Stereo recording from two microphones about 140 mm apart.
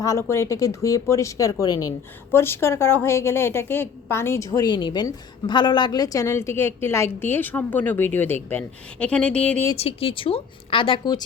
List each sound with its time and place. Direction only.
0.0 s a woman's voice: 20° left (ahead or behind)
9.7 s speech: 45° left (ahead or behind)